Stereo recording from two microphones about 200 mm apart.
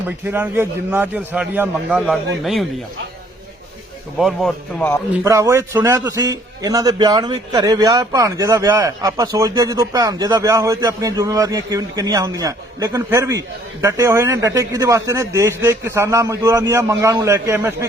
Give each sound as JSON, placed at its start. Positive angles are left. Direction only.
{"t": 0.3, "sound": "a man's voice", "side_deg": -10}
{"t": 4.2, "sound": "a man's voice", "side_deg": 0}
{"t": 5.1, "sound": "a man's voice", "side_deg": -15}